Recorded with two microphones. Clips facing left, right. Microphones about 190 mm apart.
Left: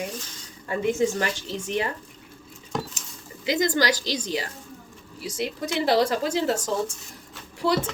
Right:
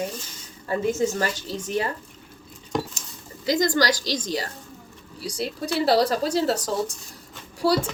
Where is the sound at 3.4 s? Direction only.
40° right (ahead or behind).